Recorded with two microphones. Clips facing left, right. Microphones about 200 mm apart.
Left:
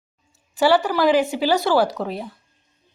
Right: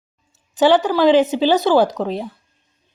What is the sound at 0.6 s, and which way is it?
A woman's voice, 20° right (ahead or behind).